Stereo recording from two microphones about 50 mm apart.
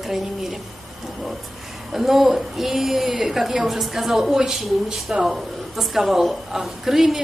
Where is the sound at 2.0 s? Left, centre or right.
Centre.